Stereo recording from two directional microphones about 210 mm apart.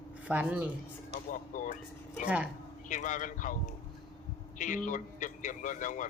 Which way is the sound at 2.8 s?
35° left (ahead or behind).